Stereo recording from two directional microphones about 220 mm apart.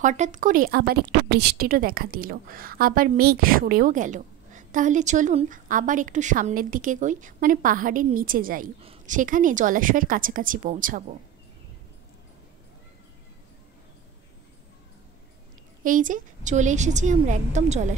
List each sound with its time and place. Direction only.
0.0 s a woman's voice: 35° right (ahead or behind)
15.8 s a woman's voice: 35° right (ahead or behind)